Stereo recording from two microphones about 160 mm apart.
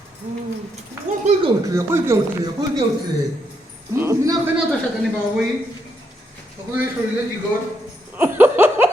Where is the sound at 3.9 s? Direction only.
15° right (ahead or behind).